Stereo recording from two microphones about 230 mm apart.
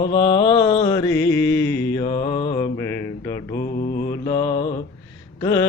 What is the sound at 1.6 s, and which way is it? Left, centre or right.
Music, centre.